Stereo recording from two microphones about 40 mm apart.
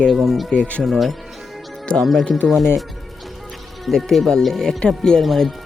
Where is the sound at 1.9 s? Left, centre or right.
Left.